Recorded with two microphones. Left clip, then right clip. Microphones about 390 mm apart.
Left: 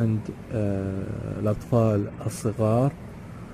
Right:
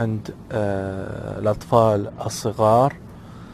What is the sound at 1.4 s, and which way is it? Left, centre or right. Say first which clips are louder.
A man's voice: right 8 dB; centre.